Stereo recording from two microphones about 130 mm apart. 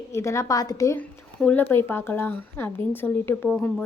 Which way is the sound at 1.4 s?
10° left (ahead or behind).